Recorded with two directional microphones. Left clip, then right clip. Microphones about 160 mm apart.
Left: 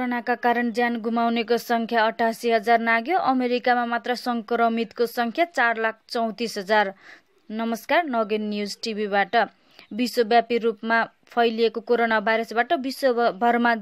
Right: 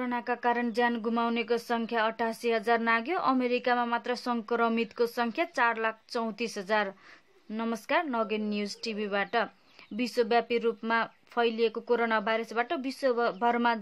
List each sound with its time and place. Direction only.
0.0 s speech: 35° left (ahead or behind)